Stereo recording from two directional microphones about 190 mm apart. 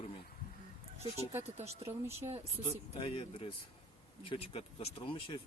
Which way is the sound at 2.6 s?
30° left (ahead or behind).